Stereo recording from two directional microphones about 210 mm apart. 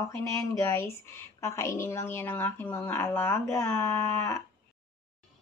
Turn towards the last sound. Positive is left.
turn(degrees=10)  # may be behind; listen again after turning